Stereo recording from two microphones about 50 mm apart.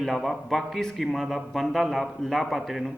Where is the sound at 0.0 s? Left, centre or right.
Centre.